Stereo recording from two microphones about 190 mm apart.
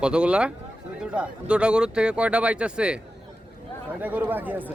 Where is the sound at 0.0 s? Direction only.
5° right (ahead or behind).